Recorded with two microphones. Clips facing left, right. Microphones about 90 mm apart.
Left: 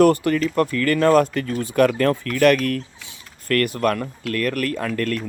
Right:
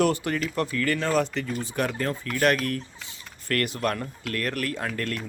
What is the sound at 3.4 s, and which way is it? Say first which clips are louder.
Speech: left 6 dB; 50° left (ahead or behind).